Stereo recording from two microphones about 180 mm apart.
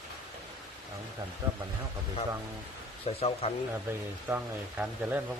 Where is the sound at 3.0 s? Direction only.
35° left (ahead or behind).